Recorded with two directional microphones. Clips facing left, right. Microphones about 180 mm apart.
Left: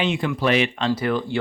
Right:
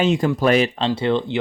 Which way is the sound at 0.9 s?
25° right (ahead or behind).